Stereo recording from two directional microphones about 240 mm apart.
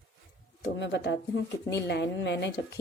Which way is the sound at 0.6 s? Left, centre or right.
Left.